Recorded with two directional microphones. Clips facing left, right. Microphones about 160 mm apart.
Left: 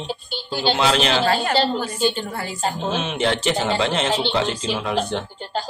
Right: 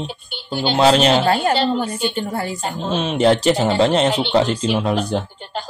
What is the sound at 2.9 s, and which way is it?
Speech, 35° right (ahead or behind).